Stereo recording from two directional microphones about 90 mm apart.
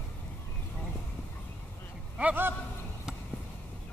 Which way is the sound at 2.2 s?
20° right (ahead or behind).